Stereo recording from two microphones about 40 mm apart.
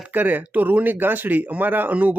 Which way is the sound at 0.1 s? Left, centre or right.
Right.